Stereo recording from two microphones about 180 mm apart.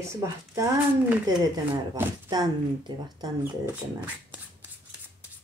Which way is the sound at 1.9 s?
20° right (ahead or behind).